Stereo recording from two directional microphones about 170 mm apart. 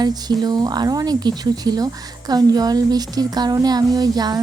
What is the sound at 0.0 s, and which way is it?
Speech, 25° right (ahead or behind).